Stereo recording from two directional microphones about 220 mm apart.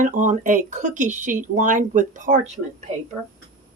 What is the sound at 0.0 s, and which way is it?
Speech, 35° right (ahead or behind).